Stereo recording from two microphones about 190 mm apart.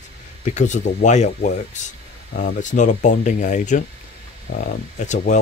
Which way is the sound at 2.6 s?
40° left (ahead or behind).